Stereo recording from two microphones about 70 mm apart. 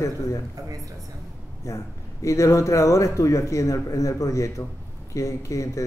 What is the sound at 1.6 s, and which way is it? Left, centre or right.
A man's voice, left.